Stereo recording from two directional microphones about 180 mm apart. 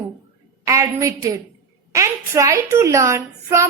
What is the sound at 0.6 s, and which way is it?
A woman's voice, 15° right (ahead or behind).